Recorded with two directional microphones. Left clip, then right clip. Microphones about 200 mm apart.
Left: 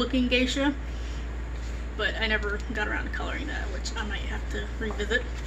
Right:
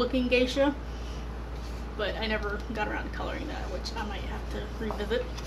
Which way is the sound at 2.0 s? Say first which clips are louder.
Left 4 dB; 15° left (ahead or behind).